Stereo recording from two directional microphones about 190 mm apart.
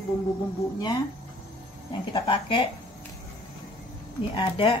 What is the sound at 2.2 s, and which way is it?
Speech, 25° left (ahead or behind).